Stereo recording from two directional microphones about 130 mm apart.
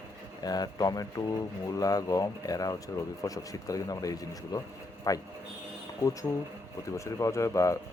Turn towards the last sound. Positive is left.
turn(degrees=25)  # may be behind; listen again after turning